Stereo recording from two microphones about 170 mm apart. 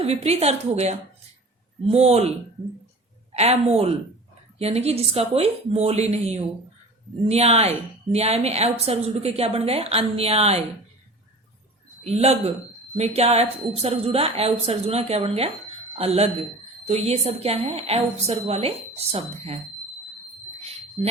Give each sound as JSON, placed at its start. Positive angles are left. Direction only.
{"t": 0.0, "sound": "a woman's voice", "side_deg": -40}
{"t": 3.3, "sound": "a woman's voice", "side_deg": -40}
{"t": 12.0, "sound": "a woman's voice", "side_deg": -40}
{"t": 20.6, "sound": "a sound", "side_deg": -40}